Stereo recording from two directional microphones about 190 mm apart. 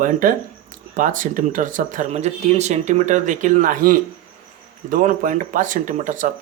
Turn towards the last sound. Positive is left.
turn(degrees=-45)  # may be behind; listen again after turning